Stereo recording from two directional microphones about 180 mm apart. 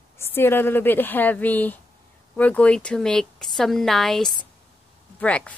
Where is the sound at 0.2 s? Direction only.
10° left (ahead or behind).